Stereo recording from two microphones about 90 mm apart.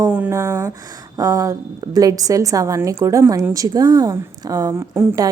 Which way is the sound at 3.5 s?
40° right (ahead or behind).